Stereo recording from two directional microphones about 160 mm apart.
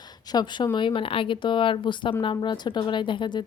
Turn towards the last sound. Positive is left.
turn(degrees=30)  # may be behind; listen again after turning